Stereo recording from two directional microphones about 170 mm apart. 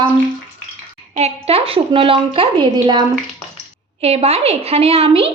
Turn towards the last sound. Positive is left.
turn(degrees=-35)  # may be behind; listen again after turning